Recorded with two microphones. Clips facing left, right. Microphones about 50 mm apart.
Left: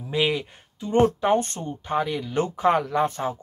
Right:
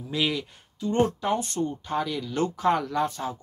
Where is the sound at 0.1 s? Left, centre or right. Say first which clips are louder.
Left 4 dB; left.